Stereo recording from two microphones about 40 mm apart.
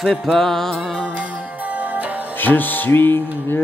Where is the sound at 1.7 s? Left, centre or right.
Right.